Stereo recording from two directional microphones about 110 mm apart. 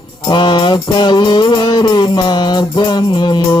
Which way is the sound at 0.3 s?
45° left (ahead or behind).